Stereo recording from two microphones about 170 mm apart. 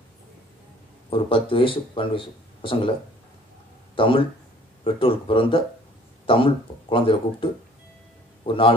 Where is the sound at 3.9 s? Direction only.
30° left (ahead or behind).